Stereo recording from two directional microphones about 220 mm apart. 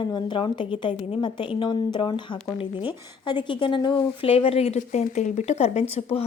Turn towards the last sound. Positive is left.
turn(degrees=25)  # may be behind; listen again after turning